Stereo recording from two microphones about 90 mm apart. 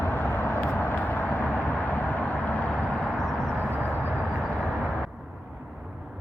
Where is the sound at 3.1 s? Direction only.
Centre (ahead or behind).